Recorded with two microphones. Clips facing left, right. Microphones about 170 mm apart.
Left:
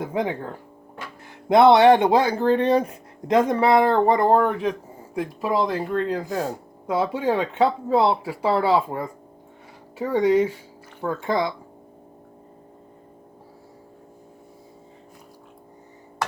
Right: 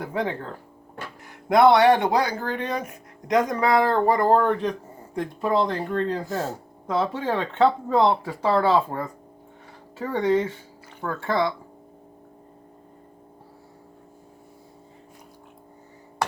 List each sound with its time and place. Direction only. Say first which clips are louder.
0.0 s speech: left 2 dB; 20° left (ahead or behind)